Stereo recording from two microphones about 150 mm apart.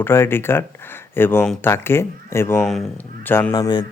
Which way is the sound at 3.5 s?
25° left (ahead or behind).